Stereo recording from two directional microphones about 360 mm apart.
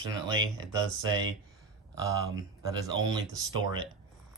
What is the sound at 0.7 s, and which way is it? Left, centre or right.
Speech, centre.